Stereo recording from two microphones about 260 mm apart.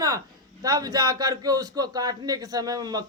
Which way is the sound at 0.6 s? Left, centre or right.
Centre.